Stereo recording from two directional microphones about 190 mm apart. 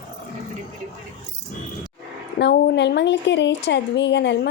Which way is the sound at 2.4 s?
65° left (ahead or behind).